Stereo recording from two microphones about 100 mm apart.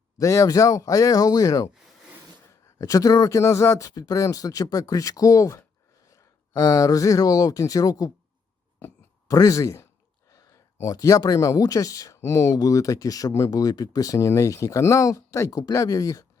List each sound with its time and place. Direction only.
0.2 s speech: 30° left (ahead or behind)
2.7 s speech: 35° left (ahead or behind)
8.8 s a sound: 35° left (ahead or behind)
11.2 s speech: 35° left (ahead or behind)